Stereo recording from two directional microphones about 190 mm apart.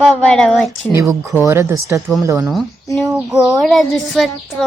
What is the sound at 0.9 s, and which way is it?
Speech, 15° right (ahead or behind).